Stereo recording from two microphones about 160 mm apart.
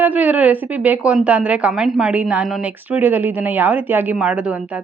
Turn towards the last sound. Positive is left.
turn(degrees=-10)  # may be behind; listen again after turning